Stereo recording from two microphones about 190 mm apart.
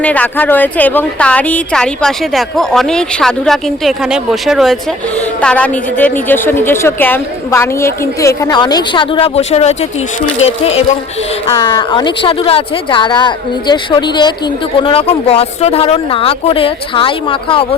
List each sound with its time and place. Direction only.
0.0 s a woman's voice: 5° left (ahead or behind); by 17.7 s 30° left (ahead or behind)